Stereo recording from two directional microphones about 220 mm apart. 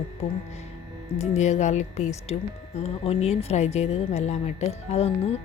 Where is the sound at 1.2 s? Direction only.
30° left (ahead or behind).